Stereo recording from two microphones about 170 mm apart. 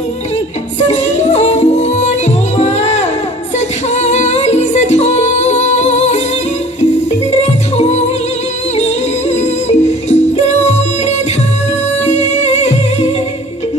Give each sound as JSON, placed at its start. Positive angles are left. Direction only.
{"t": 0.8, "sound": "music", "side_deg": 40}
{"t": 7.7, "sound": "music", "side_deg": 40}